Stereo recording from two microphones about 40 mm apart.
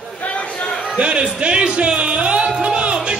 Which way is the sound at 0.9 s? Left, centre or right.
Right.